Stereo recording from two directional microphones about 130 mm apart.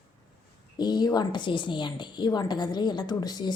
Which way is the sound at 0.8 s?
35° left (ahead or behind).